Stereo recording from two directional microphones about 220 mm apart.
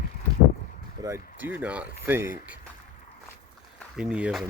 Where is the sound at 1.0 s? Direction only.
15° right (ahead or behind).